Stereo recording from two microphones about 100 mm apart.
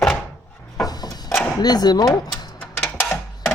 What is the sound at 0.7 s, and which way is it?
Drawer open or close, 40° left (ahead or behind).